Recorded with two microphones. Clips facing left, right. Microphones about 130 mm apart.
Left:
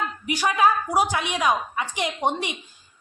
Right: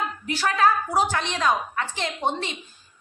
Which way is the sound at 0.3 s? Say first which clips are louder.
Left 1 dB; 15° left (ahead or behind).